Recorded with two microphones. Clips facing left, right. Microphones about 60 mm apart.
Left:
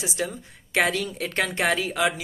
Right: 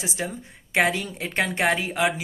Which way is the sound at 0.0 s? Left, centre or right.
Right.